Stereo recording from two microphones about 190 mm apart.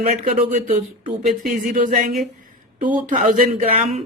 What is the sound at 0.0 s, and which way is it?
Speech, 40° right (ahead or behind).